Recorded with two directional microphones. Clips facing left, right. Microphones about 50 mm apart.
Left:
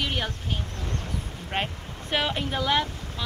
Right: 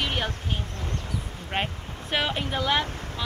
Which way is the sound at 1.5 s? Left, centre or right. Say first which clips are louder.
Right 1 dB; centre.